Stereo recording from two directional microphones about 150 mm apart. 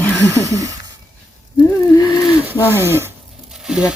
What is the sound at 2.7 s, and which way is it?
Speech, 15° right (ahead or behind).